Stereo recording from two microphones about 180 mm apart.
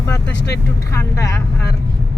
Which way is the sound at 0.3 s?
65° left (ahead or behind).